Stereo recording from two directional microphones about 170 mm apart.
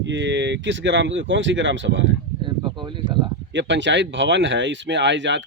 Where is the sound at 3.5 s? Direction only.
90° right.